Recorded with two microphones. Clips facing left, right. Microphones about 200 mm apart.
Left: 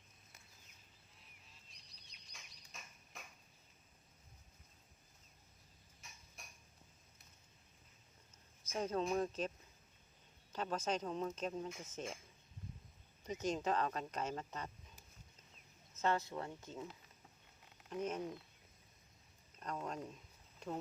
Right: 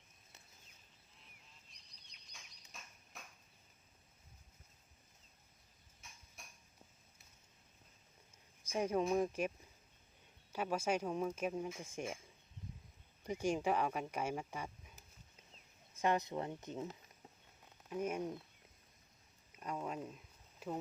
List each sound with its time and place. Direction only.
2.3 s bird: centre (ahead or behind)
6.0 s tick-tock: centre (ahead or behind)
8.6 s speech: 10° right (ahead or behind)
10.5 s speech: 10° right (ahead or behind)
13.2 s speech: 10° right (ahead or behind)
16.0 s speech: 15° right (ahead or behind)
17.8 s speech: 10° right (ahead or behind)
19.5 s a sound: 10° right (ahead or behind)